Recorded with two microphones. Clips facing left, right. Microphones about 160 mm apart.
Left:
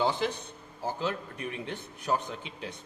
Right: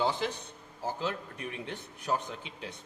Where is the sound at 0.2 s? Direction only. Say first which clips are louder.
Left 3 dB; 70° left (ahead or behind).